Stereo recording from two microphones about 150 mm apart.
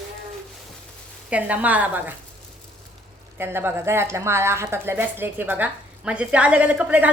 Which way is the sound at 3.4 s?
15° right (ahead or behind).